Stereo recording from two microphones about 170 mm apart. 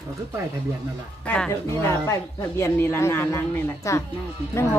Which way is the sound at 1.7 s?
15° left (ahead or behind).